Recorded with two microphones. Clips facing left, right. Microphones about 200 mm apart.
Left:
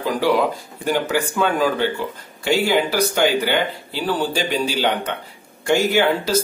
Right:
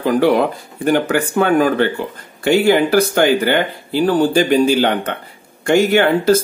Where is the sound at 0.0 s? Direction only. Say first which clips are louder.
Right 5 dB; 55° right (ahead or behind).